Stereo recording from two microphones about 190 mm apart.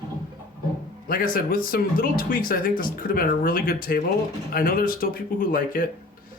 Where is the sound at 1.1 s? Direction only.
50° left (ahead or behind).